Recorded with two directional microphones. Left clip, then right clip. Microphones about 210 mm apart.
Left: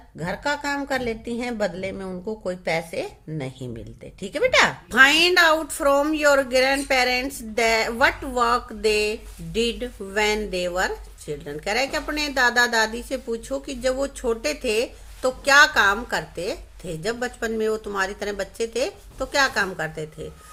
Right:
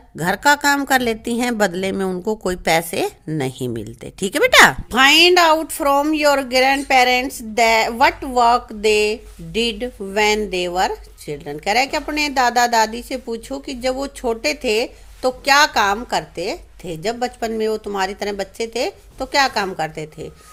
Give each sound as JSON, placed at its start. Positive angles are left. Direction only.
{"t": 0.2, "sound": "a woman's voice", "side_deg": -50}
{"t": 4.9, "sound": "speech", "side_deg": -35}